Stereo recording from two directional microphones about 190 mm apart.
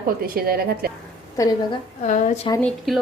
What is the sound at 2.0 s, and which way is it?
Speech, 40° left (ahead or behind).